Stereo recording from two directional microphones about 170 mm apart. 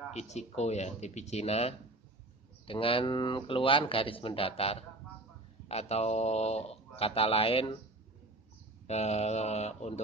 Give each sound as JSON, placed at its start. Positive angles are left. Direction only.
{"t": 0.1, "sound": "speech", "side_deg": 40}
{"t": 8.8, "sound": "speech", "side_deg": 40}